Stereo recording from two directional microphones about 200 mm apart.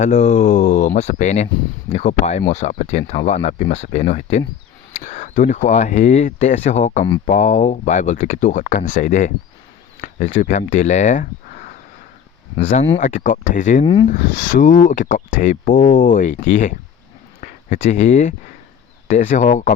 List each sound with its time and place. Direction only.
0.0 s speech: 35° left (ahead or behind)
13.8 s speech: 30° left (ahead or behind)
14.1 s speech: 40° left (ahead or behind)